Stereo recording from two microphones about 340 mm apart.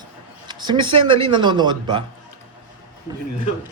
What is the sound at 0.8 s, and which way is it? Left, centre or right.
Speech, centre.